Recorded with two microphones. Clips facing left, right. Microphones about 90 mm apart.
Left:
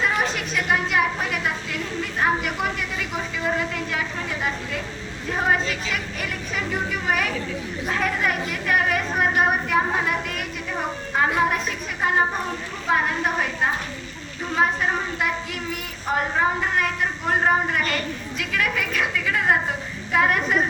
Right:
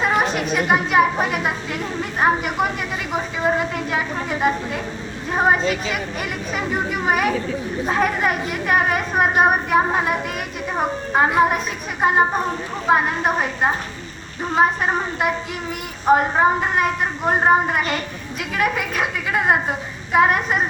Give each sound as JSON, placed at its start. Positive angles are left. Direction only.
{"t": 0.0, "sound": "a sound", "side_deg": -20}
{"t": 0.9, "sound": "a woman's voice", "side_deg": -20}
{"t": 5.3, "sound": "a woman's voice", "side_deg": -25}